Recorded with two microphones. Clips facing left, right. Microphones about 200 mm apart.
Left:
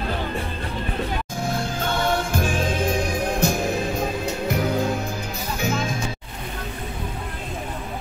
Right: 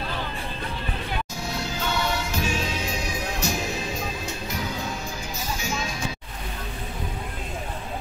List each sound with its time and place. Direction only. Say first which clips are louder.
1.4 s music: left 6 dB; 50° left (ahead or behind)